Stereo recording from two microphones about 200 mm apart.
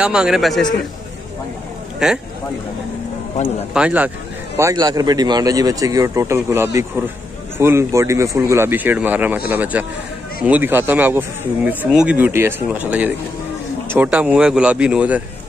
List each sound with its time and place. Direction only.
0.0 s speech: 5° right (ahead or behind)
2.0 s speech: 5° right (ahead or behind)
3.7 s speech: 5° right (ahead or behind)